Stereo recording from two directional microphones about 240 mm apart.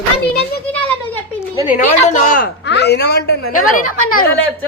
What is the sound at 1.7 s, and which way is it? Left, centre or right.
A man's voice, left.